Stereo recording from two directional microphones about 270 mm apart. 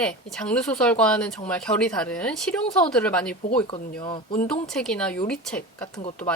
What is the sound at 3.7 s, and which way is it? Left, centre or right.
Speech, centre.